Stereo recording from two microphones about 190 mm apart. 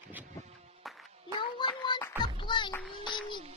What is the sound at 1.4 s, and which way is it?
Music, 25° left (ahead or behind).